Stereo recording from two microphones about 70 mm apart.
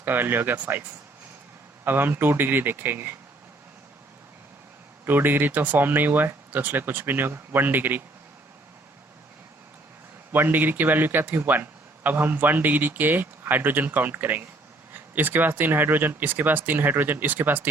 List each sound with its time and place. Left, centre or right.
0.0 s a man's voice: right
5.0 s a man's voice: right
10.3 s a man's voice: right